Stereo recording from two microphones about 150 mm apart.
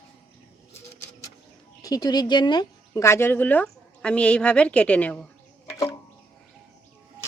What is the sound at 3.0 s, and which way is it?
A woman's voice, 15° left (ahead or behind).